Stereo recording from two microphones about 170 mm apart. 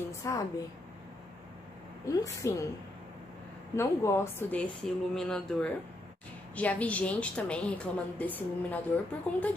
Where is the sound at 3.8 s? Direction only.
15° left (ahead or behind).